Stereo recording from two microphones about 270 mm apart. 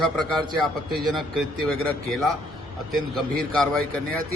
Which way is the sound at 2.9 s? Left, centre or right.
Centre.